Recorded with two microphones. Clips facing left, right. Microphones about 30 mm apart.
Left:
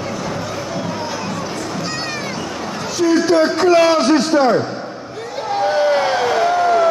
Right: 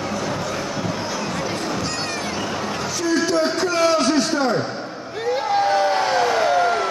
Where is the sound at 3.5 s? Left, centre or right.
Left.